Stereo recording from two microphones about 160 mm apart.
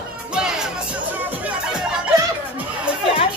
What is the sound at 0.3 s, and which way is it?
Music, 5° right (ahead or behind).